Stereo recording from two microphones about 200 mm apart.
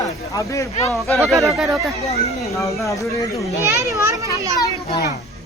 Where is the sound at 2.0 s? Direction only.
30° left (ahead or behind).